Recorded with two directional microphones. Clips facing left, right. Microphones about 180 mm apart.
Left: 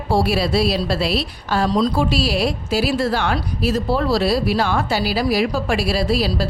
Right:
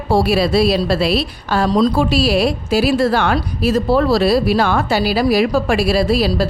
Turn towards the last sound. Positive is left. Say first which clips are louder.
# right 4 dB
turn(degrees=-55)  # may be behind; listen again after turning